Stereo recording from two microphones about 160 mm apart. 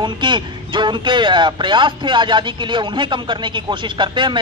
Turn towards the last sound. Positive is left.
turn(degrees=-30)  # may be behind; listen again after turning